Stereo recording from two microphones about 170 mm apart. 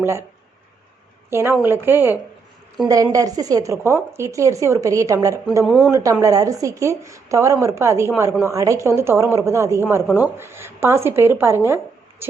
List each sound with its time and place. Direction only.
0.0 s a woman's voice: 15° right (ahead or behind)
1.3 s a woman's voice: 15° right (ahead or behind)
5.6 s speech: centre (ahead or behind)
5.9 s a woman's voice: 15° right (ahead or behind)